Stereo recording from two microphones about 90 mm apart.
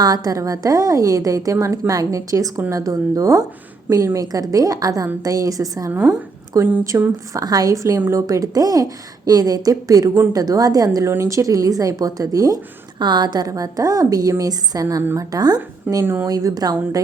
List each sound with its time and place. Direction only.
0.0 s a woman's voice: 45° right (ahead or behind)
6.9 s a woman's voice: 25° right (ahead or behind)
7.3 s a woman's voice: 45° right (ahead or behind)
13.0 s a woman's voice: 55° right (ahead or behind)